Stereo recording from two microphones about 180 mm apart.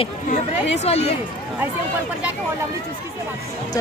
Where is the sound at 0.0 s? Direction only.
35° left (ahead or behind).